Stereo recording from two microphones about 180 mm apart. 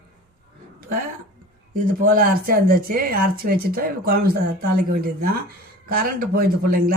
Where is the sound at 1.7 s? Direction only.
50° right (ahead or behind).